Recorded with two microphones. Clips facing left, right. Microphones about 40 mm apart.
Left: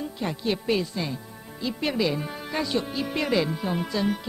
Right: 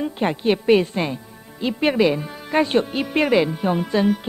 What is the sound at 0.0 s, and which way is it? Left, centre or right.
A woman's voice, right.